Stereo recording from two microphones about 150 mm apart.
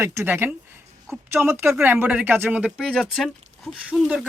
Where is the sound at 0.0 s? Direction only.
20° right (ahead or behind).